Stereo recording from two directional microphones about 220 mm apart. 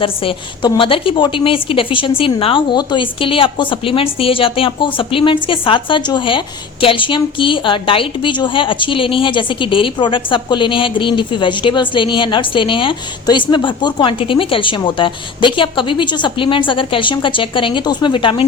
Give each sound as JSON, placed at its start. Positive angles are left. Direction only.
{"t": 0.0, "sound": "a woman's voice", "side_deg": 25}